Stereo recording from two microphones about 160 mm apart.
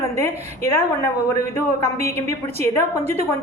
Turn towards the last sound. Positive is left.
turn(degrees=15)  # may be behind; listen again after turning